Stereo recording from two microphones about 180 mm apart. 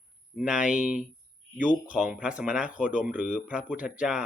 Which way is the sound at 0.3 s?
5° right (ahead or behind).